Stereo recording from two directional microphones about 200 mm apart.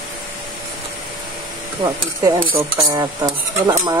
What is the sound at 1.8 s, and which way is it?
Dishes, 20° right (ahead or behind).